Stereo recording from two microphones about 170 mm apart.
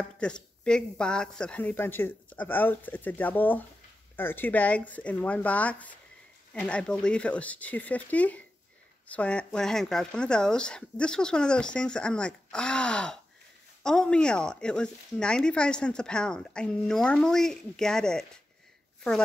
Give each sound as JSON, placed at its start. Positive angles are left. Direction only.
{"t": 0.2, "sound": "speech", "side_deg": 5}